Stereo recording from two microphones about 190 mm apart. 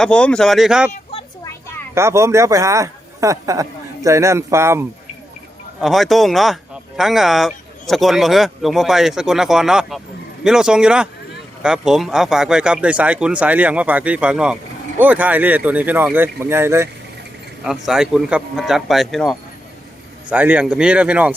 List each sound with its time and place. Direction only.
0.0 s speech: 5° left (ahead or behind)
1.1 s a sound: 30° left (ahead or behind)
2.0 s speech: 15° right (ahead or behind)
5.8 s speech: centre (ahead or behind)
17.6 s speech: centre (ahead or behind)